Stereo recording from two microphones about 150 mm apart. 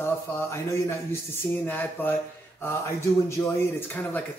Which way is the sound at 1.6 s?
10° left (ahead or behind).